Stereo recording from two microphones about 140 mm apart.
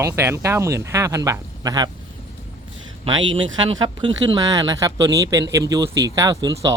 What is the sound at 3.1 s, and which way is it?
Speech, 35° right (ahead or behind).